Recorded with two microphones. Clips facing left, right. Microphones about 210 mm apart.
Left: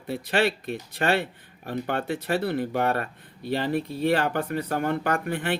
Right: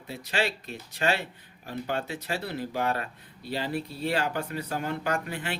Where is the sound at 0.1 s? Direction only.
55° left (ahead or behind).